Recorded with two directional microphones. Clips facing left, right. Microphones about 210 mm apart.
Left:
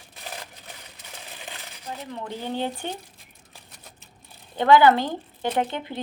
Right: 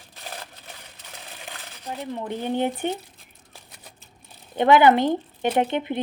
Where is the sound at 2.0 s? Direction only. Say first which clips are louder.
Right 5 dB; 20° right (ahead or behind).